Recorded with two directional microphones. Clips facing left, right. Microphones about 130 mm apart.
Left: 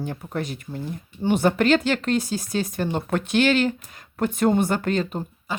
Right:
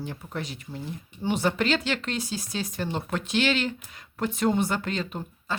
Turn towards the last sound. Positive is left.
turn(degrees=15)  # may be behind; listen again after turning